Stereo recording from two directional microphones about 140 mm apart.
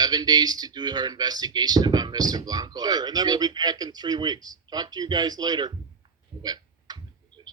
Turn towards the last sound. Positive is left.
turn(degrees=-30)  # may be behind; listen again after turning